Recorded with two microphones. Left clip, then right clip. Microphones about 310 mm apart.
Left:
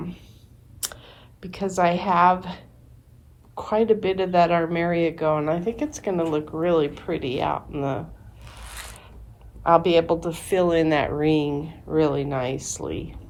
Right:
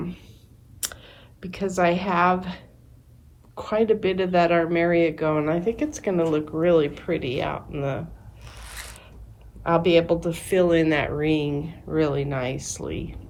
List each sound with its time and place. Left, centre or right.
0.0 s clicking: centre
0.8 s speech: centre
8.7 s a sound: centre
9.6 s speech: centre